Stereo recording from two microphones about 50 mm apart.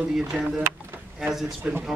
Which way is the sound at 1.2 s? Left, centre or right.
Centre.